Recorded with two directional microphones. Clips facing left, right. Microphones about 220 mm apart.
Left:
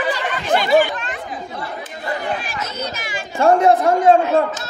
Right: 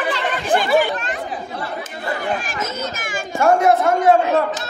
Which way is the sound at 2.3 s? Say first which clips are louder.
Right 1 dB; 50° right (ahead or behind).